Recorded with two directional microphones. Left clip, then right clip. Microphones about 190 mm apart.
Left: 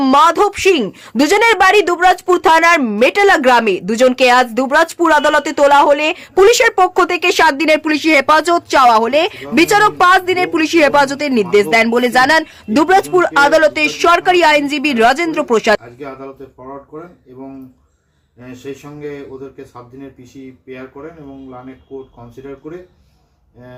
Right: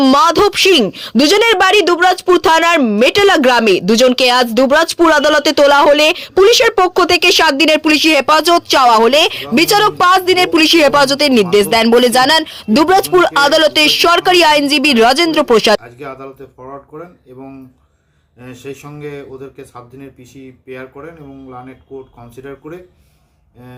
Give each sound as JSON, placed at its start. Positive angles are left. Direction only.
{"t": 0.1, "sound": "speech", "side_deg": -20}
{"t": 18.4, "sound": "speech", "side_deg": 0}